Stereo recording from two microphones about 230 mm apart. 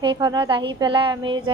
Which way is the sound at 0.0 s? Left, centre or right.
Centre.